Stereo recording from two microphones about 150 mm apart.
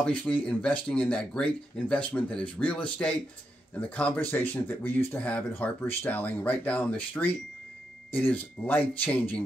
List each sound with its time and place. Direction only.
0.0 s speech: 10° left (ahead or behind)